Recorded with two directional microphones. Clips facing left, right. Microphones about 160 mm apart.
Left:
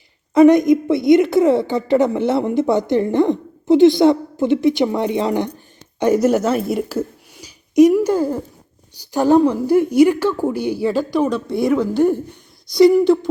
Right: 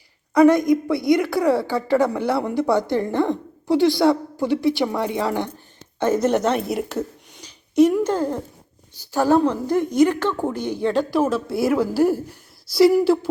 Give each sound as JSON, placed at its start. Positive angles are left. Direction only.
{"t": 0.3, "sound": "a woman's voice", "side_deg": 20}